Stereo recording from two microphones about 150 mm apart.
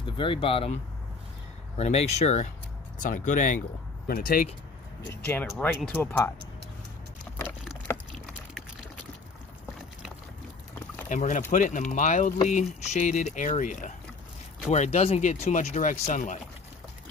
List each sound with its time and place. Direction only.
0.0 s speech: 35° left (ahead or behind)
1.8 s speech: 45° left (ahead or behind)
3.0 s speech: 60° left (ahead or behind)
4.1 s speech: 75° left (ahead or behind)
5.1 s speech: 15° left (ahead or behind)
5.6 s speech: centre (ahead or behind)
5.9 s speech: 15° left (ahead or behind)
7.9 s a sound: 15° left (ahead or behind)
11.1 s speech: 55° left (ahead or behind)